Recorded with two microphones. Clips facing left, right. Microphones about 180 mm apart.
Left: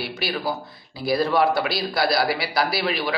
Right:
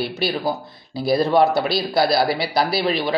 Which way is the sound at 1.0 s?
25° right (ahead or behind).